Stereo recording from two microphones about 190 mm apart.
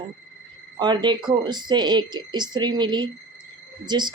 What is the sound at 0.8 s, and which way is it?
Speech, 25° right (ahead or behind).